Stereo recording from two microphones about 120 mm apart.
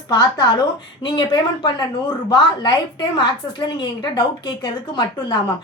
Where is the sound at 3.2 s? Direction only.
40° left (ahead or behind).